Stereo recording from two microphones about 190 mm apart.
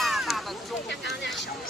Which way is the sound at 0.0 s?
Centre (ahead or behind).